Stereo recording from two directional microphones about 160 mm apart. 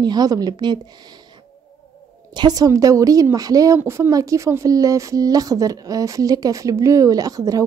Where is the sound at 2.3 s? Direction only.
25° right (ahead or behind).